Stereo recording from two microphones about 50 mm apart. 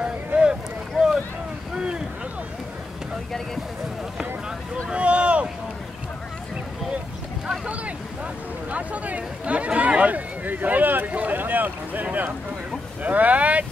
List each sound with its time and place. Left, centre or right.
0.4 s boat: centre
4.9 s boat: right
7.6 s boat: right
8.6 s speech: right
9.4 s a sound: right
13.0 s speech: right